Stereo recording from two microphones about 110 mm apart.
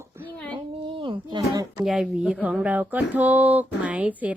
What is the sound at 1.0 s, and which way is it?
Speech, 50° right (ahead or behind).